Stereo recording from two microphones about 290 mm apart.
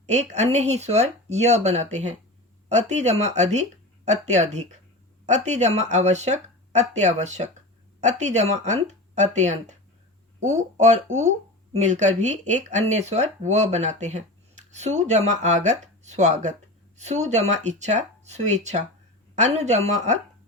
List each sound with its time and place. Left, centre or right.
0.0 s speech: right